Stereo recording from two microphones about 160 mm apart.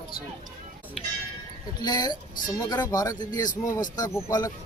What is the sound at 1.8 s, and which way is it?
Speech, 25° left (ahead or behind).